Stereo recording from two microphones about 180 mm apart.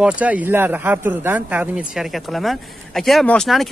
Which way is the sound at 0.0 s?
5° right (ahead or behind).